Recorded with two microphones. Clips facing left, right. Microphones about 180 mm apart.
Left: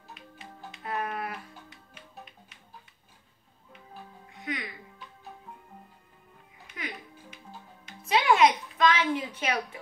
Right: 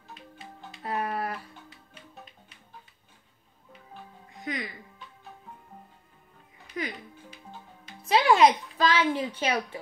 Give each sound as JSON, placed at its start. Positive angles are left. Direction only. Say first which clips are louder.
{"t": 0.7, "sound": "music", "louder": "right 2 dB", "side_deg": -35}
{"t": 4.5, "sound": "speech", "louder": "right 1 dB", "side_deg": -35}
{"t": 6.7, "sound": "music", "louder": "right 5 dB", "side_deg": -35}